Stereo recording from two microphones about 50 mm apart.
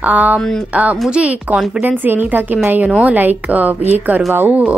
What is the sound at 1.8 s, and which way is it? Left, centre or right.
A woman's voice, right.